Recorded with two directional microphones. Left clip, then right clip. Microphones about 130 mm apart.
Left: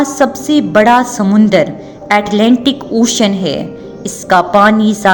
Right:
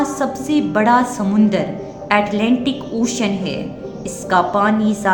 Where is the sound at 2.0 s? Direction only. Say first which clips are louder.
Left 6 dB; 90° left.